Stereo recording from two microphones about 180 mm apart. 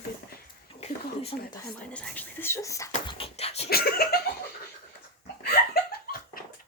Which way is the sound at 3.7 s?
60° left (ahead or behind).